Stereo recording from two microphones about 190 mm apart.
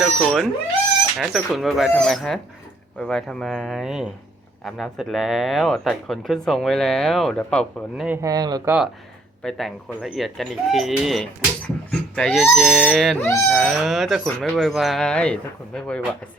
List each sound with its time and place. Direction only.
0.0 s speech: centre (ahead or behind)
8.0 s speech: 10° right (ahead or behind)
8.3 s speech: 20° right (ahead or behind)
9.4 s speech: centre (ahead or behind)
13.1 s livestock: 15° left (ahead or behind)
13.5 s speech: centre (ahead or behind)